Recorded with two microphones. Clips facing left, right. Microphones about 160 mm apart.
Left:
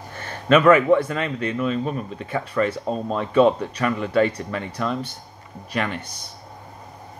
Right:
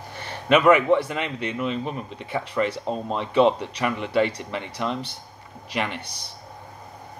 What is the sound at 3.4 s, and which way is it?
Speech, 50° left (ahead or behind).